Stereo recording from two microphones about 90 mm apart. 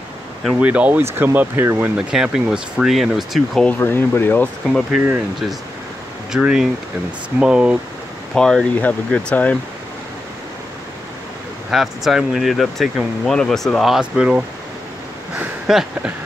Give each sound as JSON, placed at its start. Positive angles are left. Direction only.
{"t": 0.6, "sound": "speech", "side_deg": -15}
{"t": 2.0, "sound": "speech", "side_deg": -10}
{"t": 3.6, "sound": "speech", "side_deg": 25}
{"t": 4.9, "sound": "speech", "side_deg": -5}
{"t": 6.3, "sound": "speech", "side_deg": -5}
{"t": 8.4, "sound": "speech", "side_deg": 10}
{"t": 11.7, "sound": "speech", "side_deg": -5}
{"t": 15.6, "sound": "speech", "side_deg": -5}